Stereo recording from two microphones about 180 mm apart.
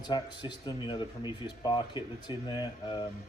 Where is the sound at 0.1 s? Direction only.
25° left (ahead or behind).